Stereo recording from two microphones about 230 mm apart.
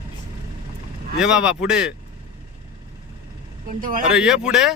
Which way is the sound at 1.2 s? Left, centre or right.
Centre.